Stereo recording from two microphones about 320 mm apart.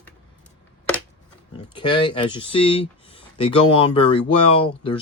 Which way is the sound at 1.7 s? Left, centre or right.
Centre.